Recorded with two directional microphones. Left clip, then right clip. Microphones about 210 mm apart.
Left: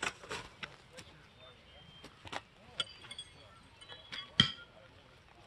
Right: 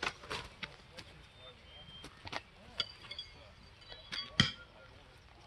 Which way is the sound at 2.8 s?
55° left (ahead or behind).